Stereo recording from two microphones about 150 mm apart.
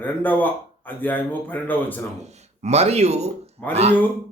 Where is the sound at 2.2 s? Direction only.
45° right (ahead or behind).